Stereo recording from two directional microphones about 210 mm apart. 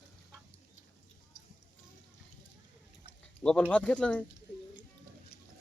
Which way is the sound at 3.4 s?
5° left (ahead or behind).